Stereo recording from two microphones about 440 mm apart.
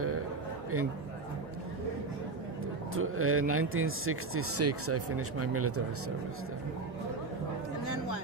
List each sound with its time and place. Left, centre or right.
3.0 s speech: right